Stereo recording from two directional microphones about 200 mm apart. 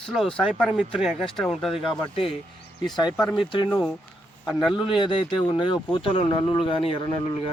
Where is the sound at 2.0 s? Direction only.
25° left (ahead or behind).